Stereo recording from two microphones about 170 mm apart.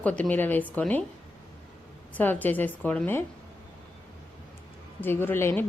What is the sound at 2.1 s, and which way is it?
A woman's voice, 10° left (ahead or behind).